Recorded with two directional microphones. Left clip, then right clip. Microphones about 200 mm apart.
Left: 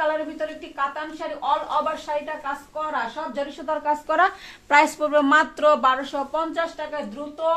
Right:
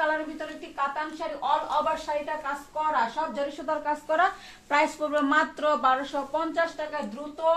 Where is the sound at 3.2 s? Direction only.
30° left (ahead or behind).